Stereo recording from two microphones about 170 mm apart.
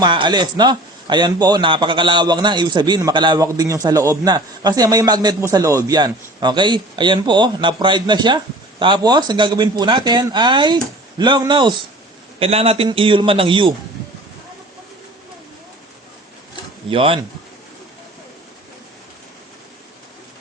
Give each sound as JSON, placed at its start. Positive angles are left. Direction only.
{"t": 0.0, "sound": "a man's voice", "side_deg": -25}
{"t": 16.9, "sound": "a man's voice", "side_deg": -30}